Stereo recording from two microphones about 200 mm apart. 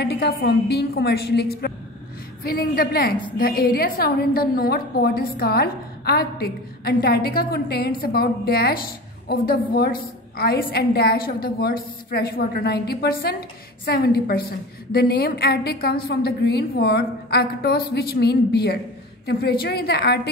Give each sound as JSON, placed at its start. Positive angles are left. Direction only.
{"t": 0.0, "sound": "a woman's voice", "side_deg": 55}